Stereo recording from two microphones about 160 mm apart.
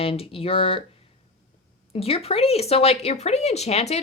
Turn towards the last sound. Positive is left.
turn(degrees=40)  # may be behind; listen again after turning